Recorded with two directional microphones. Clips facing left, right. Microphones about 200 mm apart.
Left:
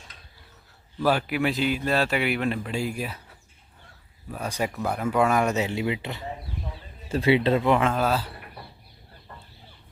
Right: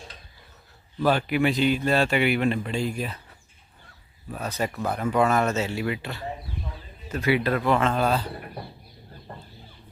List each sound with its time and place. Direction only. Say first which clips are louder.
1.0 s speech: right 1 dB; 5° left (ahead or behind)
4.4 s speech: even; 10° left (ahead or behind)
7.9 s speech: right 1 dB; 5° left (ahead or behind)